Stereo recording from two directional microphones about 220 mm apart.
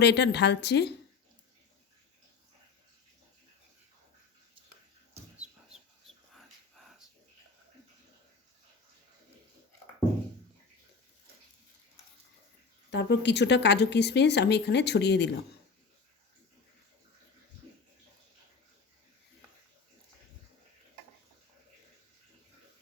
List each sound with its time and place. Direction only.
0.0 s speech: 50° left (ahead or behind)
5.4 s chicken: 5° right (ahead or behind)
12.9 s speech: 50° left (ahead or behind)